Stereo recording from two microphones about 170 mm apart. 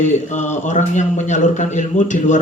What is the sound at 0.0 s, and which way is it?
Speech, 45° left (ahead or behind).